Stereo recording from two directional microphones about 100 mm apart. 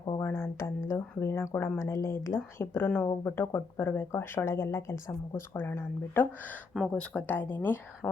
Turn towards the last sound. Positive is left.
turn(degrees=20)  # may be behind; listen again after turning